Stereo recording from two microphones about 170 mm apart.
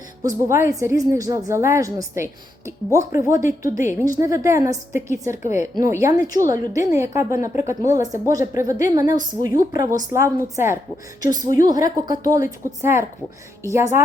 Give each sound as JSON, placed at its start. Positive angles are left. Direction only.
{"t": 0.2, "sound": "a woman's voice", "side_deg": -20}
{"t": 3.4, "sound": "a woman's voice", "side_deg": 50}
{"t": 4.0, "sound": "a woman's voice", "side_deg": -20}